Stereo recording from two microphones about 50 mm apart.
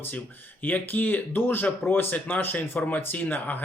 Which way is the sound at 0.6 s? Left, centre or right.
Left.